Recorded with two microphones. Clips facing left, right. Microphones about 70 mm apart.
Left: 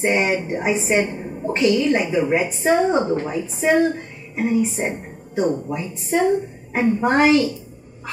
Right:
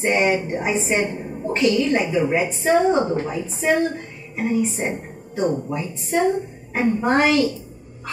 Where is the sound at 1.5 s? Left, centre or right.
Left.